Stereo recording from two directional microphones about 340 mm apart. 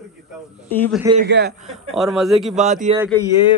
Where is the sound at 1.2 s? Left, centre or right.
Right.